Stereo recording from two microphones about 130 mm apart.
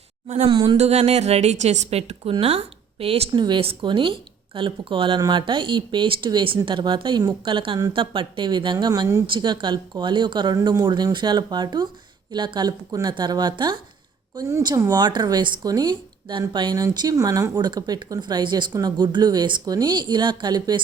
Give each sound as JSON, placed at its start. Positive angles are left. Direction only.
{"t": 0.3, "sound": "speech", "side_deg": -50}
{"t": 9.2, "sound": "speech", "side_deg": -35}